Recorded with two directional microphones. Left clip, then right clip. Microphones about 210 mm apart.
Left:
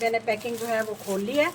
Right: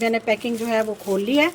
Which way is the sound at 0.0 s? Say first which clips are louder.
Right 4 dB; 45° right (ahead or behind).